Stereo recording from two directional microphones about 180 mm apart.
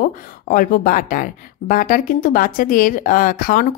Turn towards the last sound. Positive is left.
turn(degrees=50)  # may be behind; listen again after turning